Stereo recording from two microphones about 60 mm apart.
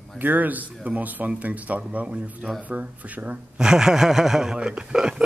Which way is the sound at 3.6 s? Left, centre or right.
Centre.